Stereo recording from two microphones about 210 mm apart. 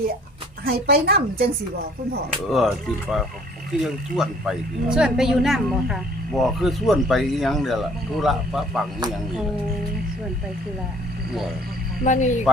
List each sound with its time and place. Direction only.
0.6 s a woman's voice: 45° right (ahead or behind)
2.5 s speech: centre (ahead or behind)
12.0 s speech: 35° left (ahead or behind)